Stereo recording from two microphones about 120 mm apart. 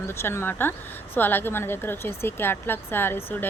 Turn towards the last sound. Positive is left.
turn(degrees=20)  # may be behind; listen again after turning